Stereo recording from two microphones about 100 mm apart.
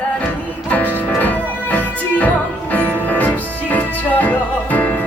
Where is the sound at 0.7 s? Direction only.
15° left (ahead or behind).